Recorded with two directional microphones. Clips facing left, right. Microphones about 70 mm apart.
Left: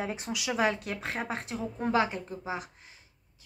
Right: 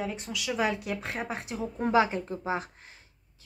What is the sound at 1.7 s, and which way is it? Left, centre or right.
A woman's voice, centre.